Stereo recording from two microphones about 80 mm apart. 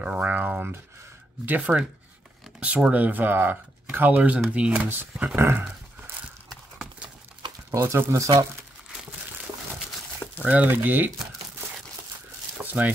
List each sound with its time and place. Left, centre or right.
0.0 s speech: centre
7.8 s speech: right
10.4 s speech: centre
12.8 s speech: right